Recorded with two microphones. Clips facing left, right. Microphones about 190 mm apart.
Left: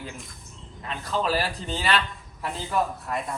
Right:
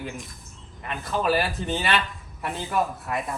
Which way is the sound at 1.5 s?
20° right (ahead or behind).